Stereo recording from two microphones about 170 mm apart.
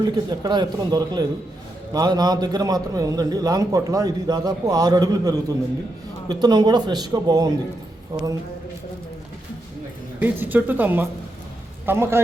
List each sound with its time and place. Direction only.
0.0 s a man's voice: 25° right (ahead or behind)
10.2 s speech: 10° right (ahead or behind)